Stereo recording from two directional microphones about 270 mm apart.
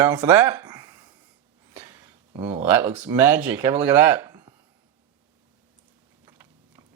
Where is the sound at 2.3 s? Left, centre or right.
Centre.